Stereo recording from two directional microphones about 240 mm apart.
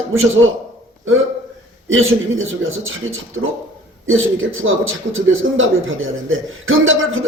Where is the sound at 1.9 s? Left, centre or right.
Right.